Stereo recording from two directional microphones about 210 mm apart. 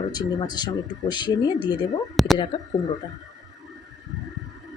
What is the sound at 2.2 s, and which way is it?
Speech, centre (ahead or behind).